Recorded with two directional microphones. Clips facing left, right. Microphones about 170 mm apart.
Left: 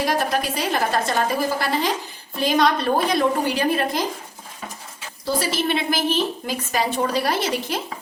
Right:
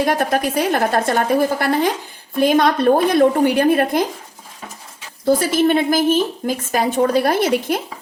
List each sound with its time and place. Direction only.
0.0 s a woman's voice: 55° right (ahead or behind)
5.2 s a woman's voice: 50° right (ahead or behind)